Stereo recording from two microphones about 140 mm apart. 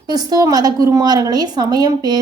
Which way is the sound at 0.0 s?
30° right (ahead or behind).